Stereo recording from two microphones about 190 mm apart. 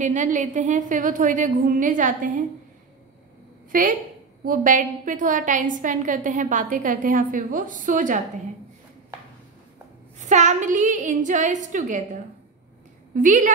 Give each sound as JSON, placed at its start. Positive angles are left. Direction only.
{"t": 0.0, "sound": "a woman's voice", "side_deg": -40}
{"t": 3.7, "sound": "a woman's voice", "side_deg": -45}
{"t": 10.1, "sound": "a woman's voice", "side_deg": -40}